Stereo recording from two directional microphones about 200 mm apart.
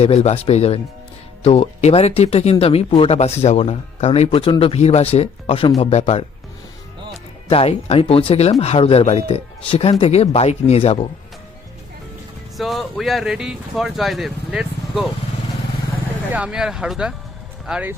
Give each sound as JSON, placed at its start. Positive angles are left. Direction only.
{"t": 0.0, "sound": "speech", "side_deg": 35}
{"t": 7.4, "sound": "speech", "side_deg": 30}
{"t": 12.5, "sound": "speech", "side_deg": 0}
{"t": 16.3, "sound": "speech", "side_deg": -5}